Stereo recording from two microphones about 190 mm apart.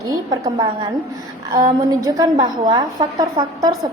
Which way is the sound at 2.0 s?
20° right (ahead or behind).